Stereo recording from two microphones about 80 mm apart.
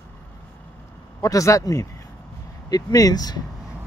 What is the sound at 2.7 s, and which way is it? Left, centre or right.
Speech, left.